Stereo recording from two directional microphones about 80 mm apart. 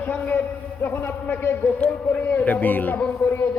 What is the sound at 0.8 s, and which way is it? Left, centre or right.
A man's voice, left.